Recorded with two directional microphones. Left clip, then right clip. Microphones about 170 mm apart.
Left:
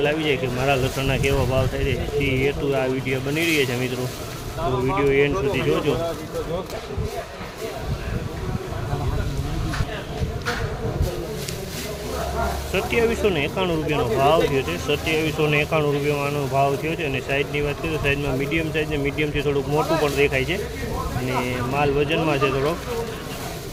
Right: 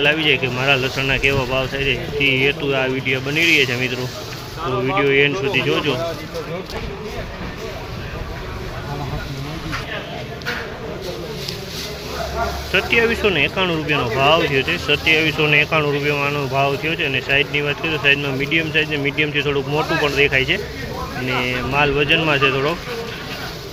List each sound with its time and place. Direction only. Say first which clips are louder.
0.0 s speech: right 5 dB; 5° left (ahead or behind)
12.7 s speech: right 5 dB; centre (ahead or behind)